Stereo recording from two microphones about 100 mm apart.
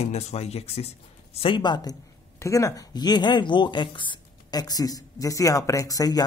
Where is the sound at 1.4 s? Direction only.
50° left (ahead or behind).